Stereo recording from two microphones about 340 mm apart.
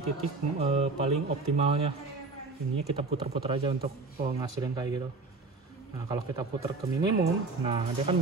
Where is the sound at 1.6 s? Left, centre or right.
Centre.